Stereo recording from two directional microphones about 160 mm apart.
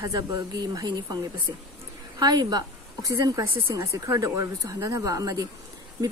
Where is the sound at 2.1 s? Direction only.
25° right (ahead or behind).